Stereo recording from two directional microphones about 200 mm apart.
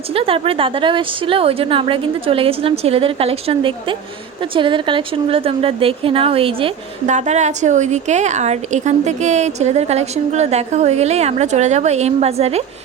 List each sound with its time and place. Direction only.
0.1 s a woman's voice: 30° right (ahead or behind)